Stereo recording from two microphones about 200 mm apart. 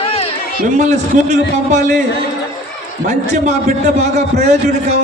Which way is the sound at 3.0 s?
35° right (ahead or behind).